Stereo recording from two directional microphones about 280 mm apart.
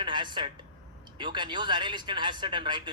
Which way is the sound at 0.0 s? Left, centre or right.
Centre.